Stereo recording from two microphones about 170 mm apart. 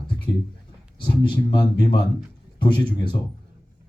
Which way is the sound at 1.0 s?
30° left (ahead or behind).